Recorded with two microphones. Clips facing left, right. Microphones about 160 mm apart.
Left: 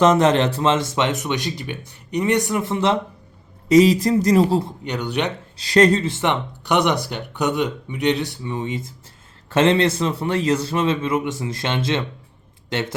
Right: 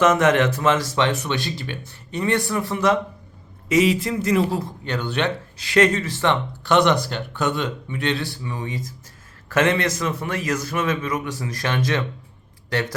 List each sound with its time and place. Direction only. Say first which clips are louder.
0.0 s speech: left 2 dB; 30° left (ahead or behind)
3.7 s speech: left 5 dB; 35° left (ahead or behind)
4.8 s speech: left 1 dB; 15° left (ahead or behind)
5.5 s speech: left 3 dB; 35° left (ahead or behind)